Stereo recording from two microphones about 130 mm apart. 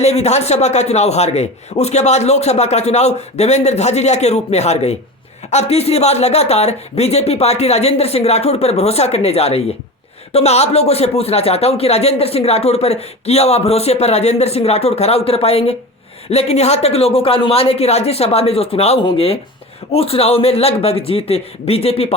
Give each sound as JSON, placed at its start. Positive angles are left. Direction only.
{"t": 0.0, "sound": "a man's voice", "side_deg": 55}